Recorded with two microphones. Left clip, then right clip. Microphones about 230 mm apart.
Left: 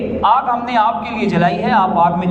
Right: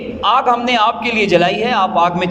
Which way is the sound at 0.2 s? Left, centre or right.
Right.